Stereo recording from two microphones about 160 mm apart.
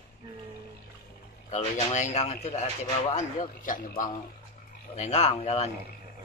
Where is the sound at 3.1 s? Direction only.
55° left (ahead or behind).